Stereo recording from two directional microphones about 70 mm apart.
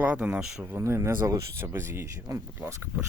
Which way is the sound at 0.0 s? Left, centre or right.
Centre.